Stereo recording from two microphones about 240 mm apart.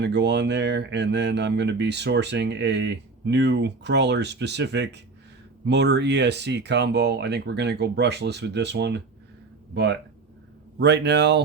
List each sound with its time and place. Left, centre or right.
0.0 s speech: right